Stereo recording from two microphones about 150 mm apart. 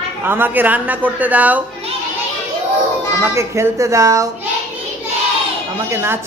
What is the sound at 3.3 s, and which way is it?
Speech, 20° right (ahead or behind).